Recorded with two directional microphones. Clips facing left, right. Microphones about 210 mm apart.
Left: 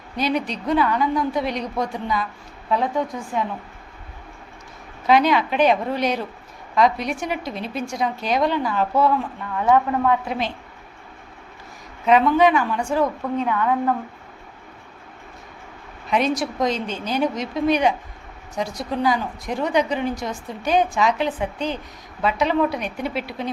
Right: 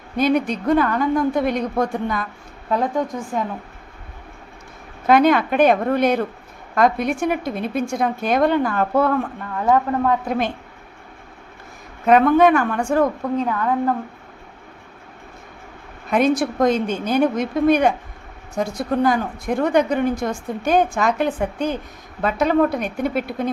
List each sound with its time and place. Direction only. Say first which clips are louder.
0.2 s a woman's voice: right 5 dB; 50° right (ahead or behind)
5.0 s a woman's voice: right 3 dB; 50° right (ahead or behind)
9.6 s a woman's voice: even; 40° right (ahead or behind)
12.0 s a woman's voice: right 3 dB; 50° right (ahead or behind)
13.4 s a woman's voice: left 1 dB; 40° right (ahead or behind)
16.0 s a woman's voice: right 4 dB; 50° right (ahead or behind)